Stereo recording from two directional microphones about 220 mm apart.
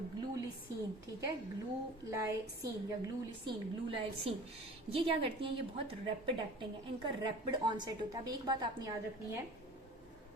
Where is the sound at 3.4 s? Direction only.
25° right (ahead or behind).